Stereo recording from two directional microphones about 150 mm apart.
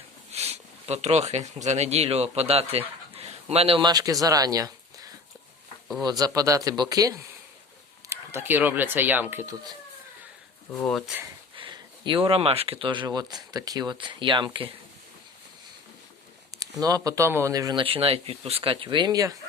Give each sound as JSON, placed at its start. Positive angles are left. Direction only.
{"t": 0.3, "sound": "speech", "side_deg": -45}
{"t": 10.8, "sound": "speech", "side_deg": 0}
{"t": 11.5, "sound": "speech", "side_deg": -35}
{"t": 16.8, "sound": "speech", "side_deg": -25}
{"t": 17.8, "sound": "speech", "side_deg": -40}